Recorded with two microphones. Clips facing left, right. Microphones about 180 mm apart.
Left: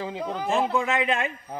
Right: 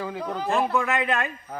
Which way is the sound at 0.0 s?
20° left (ahead or behind).